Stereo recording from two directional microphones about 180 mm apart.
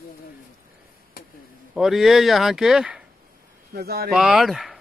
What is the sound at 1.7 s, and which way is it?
Speech, centre (ahead or behind).